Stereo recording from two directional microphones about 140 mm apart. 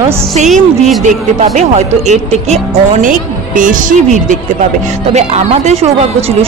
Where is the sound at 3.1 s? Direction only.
70° right (ahead or behind).